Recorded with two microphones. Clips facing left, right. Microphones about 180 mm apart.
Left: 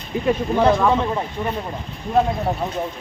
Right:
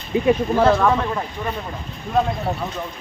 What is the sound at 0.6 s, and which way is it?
Speech, 15° left (ahead or behind).